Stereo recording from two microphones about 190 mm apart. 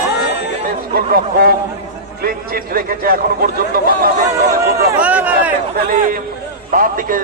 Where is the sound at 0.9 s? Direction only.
55° right (ahead or behind).